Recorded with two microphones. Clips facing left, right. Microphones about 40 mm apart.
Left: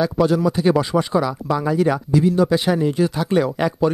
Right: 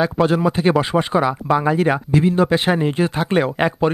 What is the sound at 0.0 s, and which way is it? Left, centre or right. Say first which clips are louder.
Speech: right 1 dB; right.